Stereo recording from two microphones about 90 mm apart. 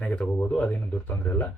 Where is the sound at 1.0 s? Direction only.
25° left (ahead or behind).